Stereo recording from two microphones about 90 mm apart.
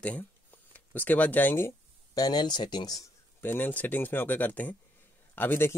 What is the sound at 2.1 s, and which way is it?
Speech, 50° left (ahead or behind).